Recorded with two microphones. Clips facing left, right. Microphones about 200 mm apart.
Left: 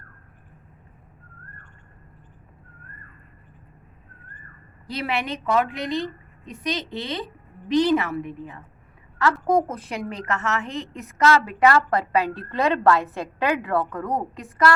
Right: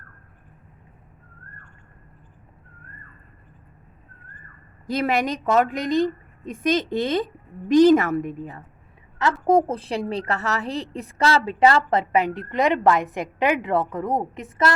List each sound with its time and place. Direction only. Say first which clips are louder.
4.9 s a woman's voice: right 5 dB; 45° right (ahead or behind)
9.1 s a woman's voice: right 2 dB; 25° right (ahead or behind)